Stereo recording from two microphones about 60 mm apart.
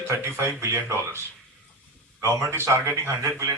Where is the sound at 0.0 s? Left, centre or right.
Right.